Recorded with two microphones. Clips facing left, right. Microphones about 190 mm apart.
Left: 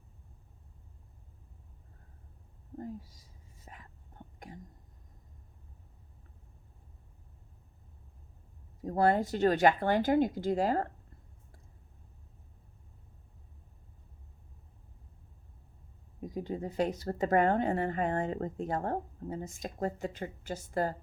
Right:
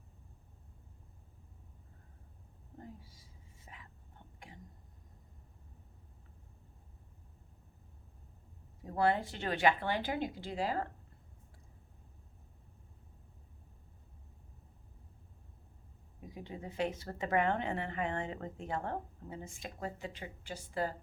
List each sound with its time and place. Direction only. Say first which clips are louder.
2.7 s speech: left 10 dB; 40° left (ahead or behind)
3.7 s a sound: left 3 dB; 45° left (ahead or behind)
4.4 s whispering: left 7 dB; 40° left (ahead or behind)
8.8 s speech: left 4 dB; 40° left (ahead or behind)
16.2 s speech: left 9 dB; 40° left (ahead or behind)